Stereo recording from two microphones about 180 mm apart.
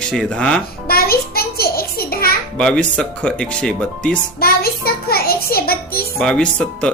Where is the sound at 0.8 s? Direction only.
55° left (ahead or behind).